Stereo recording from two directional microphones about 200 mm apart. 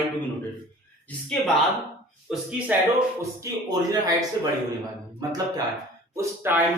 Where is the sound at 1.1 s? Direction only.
5° left (ahead or behind).